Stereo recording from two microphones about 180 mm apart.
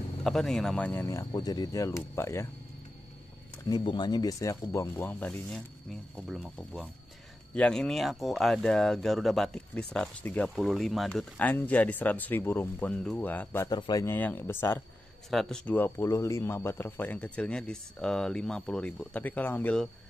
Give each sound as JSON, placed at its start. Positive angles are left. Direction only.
{"t": 0.2, "sound": "speech", "side_deg": 0}
{"t": 3.6, "sound": "speech", "side_deg": 25}
{"t": 13.7, "sound": "speech", "side_deg": 25}
{"t": 14.0, "sound": "speech", "side_deg": 10}
{"t": 15.2, "sound": "speech", "side_deg": 0}